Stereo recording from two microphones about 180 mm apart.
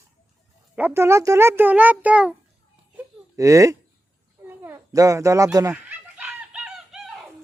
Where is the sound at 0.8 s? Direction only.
10° right (ahead or behind).